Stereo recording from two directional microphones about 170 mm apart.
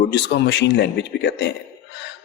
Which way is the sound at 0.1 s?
85° left.